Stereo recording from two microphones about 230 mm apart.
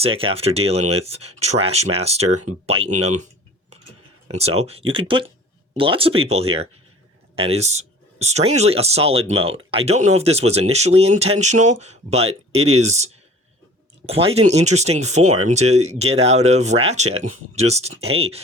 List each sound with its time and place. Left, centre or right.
0.0 s speech: right
4.4 s speech: right
14.1 s speech: right